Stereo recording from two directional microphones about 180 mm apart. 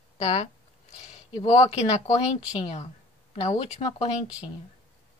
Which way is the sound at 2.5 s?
30° left (ahead or behind).